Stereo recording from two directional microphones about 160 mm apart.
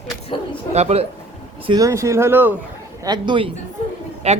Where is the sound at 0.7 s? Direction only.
40° right (ahead or behind).